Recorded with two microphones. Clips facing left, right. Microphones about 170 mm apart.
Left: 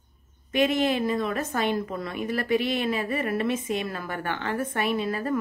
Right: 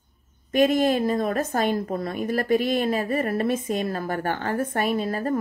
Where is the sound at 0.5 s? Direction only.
45° right (ahead or behind).